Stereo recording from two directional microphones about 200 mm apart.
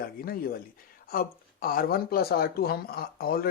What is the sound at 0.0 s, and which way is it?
Speech, 45° left (ahead or behind).